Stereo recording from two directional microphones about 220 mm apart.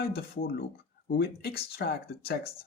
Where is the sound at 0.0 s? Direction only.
45° left (ahead or behind).